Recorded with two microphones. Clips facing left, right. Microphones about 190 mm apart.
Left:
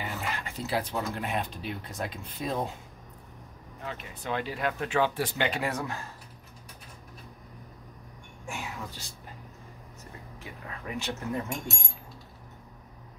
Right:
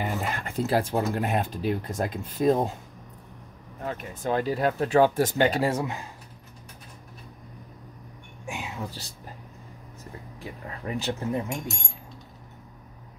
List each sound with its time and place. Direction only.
0.0 s speech: 50° right (ahead or behind)
3.8 s speech: 45° right (ahead or behind)
5.8 s speech: 20° right (ahead or behind)
8.5 s a sound: 20° right (ahead or behind)
10.4 s speech: 35° right (ahead or behind)
11.3 s speech: 20° right (ahead or behind)